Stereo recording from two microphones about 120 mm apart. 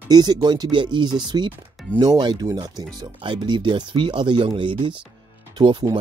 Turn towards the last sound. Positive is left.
turn(degrees=-35)  # may be behind; listen again after turning